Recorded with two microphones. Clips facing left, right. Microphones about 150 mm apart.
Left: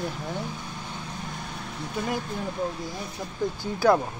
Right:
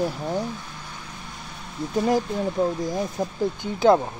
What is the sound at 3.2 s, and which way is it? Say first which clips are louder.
Speech: right 9 dB; 45° right (ahead or behind).